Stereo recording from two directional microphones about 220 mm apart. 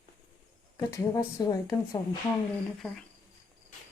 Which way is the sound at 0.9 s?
15° left (ahead or behind).